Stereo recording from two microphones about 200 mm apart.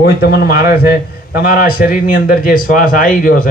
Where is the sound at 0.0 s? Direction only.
50° left (ahead or behind).